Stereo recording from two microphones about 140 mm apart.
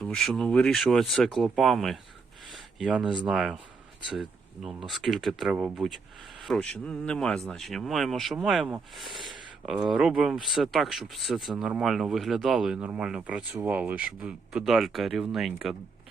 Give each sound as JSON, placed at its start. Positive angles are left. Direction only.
{"t": 0.0, "sound": "speech", "side_deg": 5}
{"t": 2.5, "sound": "a sound", "side_deg": 0}
{"t": 3.2, "sound": "speech", "side_deg": -5}